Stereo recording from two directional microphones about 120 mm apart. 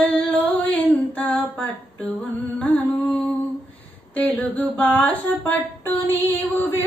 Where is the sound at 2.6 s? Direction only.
15° left (ahead or behind).